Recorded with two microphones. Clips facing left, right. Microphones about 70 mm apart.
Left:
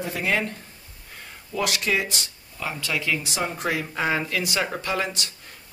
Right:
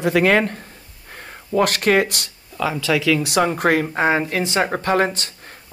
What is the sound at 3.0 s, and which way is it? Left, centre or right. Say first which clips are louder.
Speech: right 10 dB; right.